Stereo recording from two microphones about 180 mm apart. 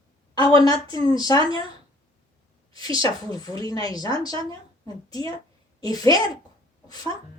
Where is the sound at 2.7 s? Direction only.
20° left (ahead or behind).